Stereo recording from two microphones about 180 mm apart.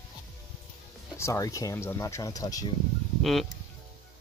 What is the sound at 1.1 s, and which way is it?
Speech, 15° left (ahead or behind).